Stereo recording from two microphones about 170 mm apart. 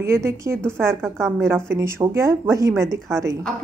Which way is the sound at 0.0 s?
15° right (ahead or behind).